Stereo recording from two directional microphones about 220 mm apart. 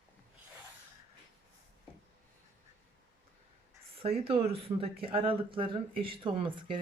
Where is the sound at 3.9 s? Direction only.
25° right (ahead or behind).